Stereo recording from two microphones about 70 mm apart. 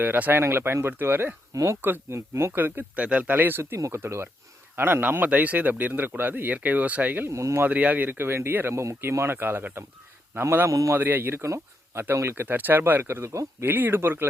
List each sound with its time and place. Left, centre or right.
0.0 s speech: right
1.5 s speech: right
1.8 s speech: right
2.5 s a man's voice: right
3.8 s a man's voice: right
7.3 s speech: right
7.6 s speech: right
10.7 s speech: right
10.9 s speech: right
11.4 s speech: right
12.0 s speech: right
13.7 s a man's voice: right